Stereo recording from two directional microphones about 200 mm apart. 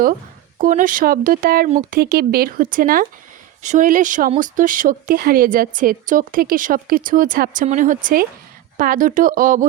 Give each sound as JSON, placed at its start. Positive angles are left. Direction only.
{"t": 0.6, "sound": "speech", "side_deg": -40}